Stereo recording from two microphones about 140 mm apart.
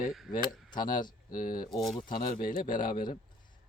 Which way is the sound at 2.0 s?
75° left (ahead or behind).